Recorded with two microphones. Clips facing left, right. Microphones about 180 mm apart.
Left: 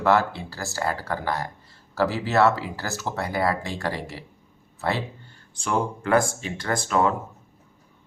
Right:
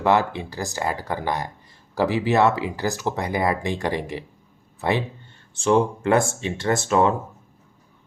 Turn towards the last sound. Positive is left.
turn(degrees=-25)  # may be behind; listen again after turning